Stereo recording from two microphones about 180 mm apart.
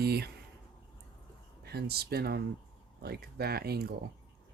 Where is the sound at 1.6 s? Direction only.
60° right (ahead or behind).